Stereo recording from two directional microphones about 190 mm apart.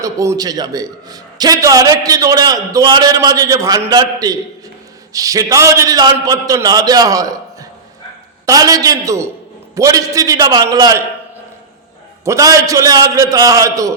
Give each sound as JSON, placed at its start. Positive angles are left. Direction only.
{"t": 0.0, "sound": "a man's voice", "side_deg": -15}
{"t": 12.2, "sound": "a man's voice", "side_deg": -15}